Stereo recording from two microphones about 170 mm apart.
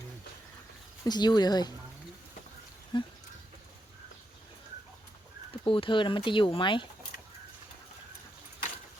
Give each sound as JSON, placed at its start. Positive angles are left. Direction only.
{"t": 1.0, "sound": "speech", "side_deg": 25}
{"t": 2.9, "sound": "speech", "side_deg": 25}
{"t": 5.6, "sound": "speech", "side_deg": 30}